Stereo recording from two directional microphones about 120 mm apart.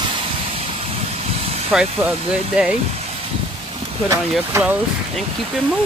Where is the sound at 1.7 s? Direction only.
5° right (ahead or behind).